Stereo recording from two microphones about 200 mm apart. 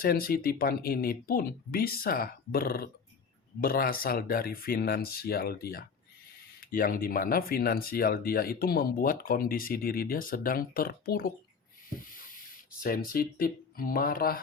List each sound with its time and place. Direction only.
0.0 s speech: 45° left (ahead or behind)
12.8 s speech: 45° left (ahead or behind)